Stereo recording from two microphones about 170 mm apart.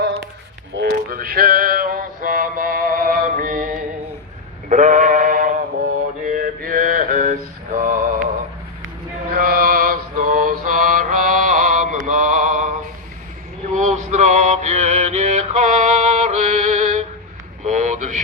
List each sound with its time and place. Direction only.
0.7 s male singing: 70° right (ahead or behind); by 3.7 s 50° right (ahead or behind)
4.7 s sheep: 50° right (ahead or behind)
6.2 s mantra: 55° right (ahead or behind)
9.3 s mantra: 55° right (ahead or behind)
13.7 s mantra: 45° right (ahead or behind)
17.6 s a sound: 45° right (ahead or behind)